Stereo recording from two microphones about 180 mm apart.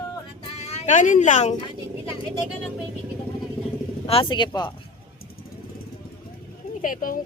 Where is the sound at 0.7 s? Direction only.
40° left (ahead or behind).